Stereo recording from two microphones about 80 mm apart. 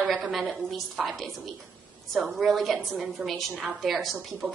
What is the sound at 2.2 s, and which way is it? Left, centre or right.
A woman's voice, centre.